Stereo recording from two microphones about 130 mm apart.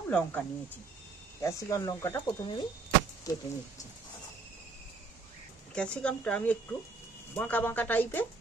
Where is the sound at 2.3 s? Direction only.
35° left (ahead or behind).